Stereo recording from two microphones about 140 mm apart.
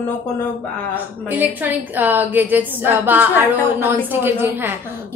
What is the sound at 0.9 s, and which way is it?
A woman's voice, 10° right (ahead or behind).